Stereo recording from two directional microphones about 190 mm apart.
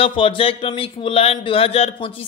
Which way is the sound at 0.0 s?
25° left (ahead or behind).